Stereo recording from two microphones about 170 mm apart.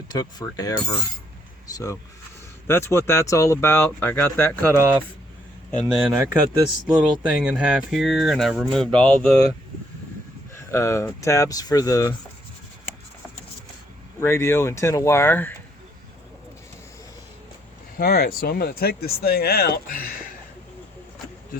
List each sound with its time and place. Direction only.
0.1 s speech: 25° left (ahead or behind)
4.8 s speech: 10° right (ahead or behind); by 9.4 s 5° left (ahead or behind)
10.5 s speech: 15° left (ahead or behind)
14.2 s speech: 15° left (ahead or behind)
17.9 s speech: 60° left (ahead or behind)